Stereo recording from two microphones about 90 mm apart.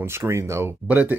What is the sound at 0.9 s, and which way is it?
Speech, 20° right (ahead or behind).